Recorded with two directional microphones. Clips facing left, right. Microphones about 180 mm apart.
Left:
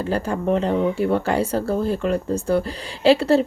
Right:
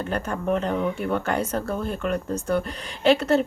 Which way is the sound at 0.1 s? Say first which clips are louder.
Left 4 dB; 30° left (ahead or behind).